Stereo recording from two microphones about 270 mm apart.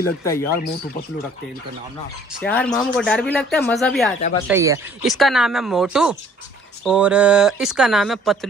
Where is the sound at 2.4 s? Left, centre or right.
Centre.